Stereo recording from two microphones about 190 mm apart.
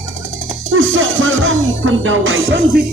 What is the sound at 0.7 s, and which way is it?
Music, 90° right.